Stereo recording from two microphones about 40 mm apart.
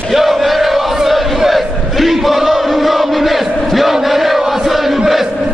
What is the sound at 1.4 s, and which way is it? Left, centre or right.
Chant, centre.